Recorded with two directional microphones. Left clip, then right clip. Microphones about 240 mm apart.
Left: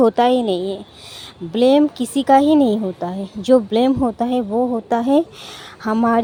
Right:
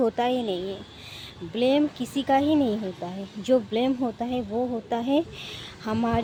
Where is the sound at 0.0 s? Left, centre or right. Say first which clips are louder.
Left 10 dB; left.